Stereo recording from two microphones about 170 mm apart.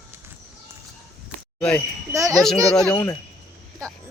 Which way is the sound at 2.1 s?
20° right (ahead or behind).